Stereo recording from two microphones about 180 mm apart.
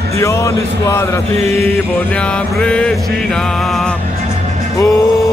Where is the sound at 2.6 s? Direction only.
5° left (ahead or behind).